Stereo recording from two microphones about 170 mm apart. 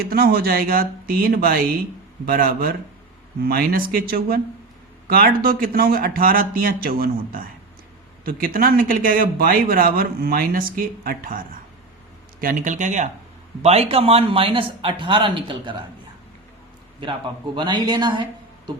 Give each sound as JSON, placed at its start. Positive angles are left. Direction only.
{"t": 0.0, "sound": "a man's voice", "side_deg": -65}
{"t": 17.0, "sound": "speech", "side_deg": -30}